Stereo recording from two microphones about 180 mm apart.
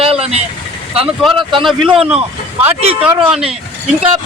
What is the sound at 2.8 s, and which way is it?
Speech, 35° right (ahead or behind).